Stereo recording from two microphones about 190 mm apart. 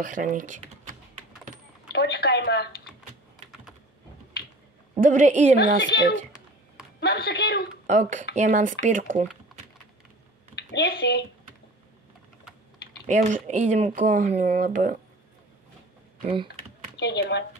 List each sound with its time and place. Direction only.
0.0 s speech: 45° right (ahead or behind)
1.9 s a sound: 60° left (ahead or behind)
5.0 s speech: 40° right (ahead or behind)
5.8 s speech: 75° left (ahead or behind)
7.0 s speech: 60° left (ahead or behind)
7.8 s speech: 40° right (ahead or behind)
10.5 s speech: 60° left (ahead or behind)
13.1 s speech: 40° right (ahead or behind)
16.3 s speech: 30° right (ahead or behind)
17.0 s speech: 65° left (ahead or behind)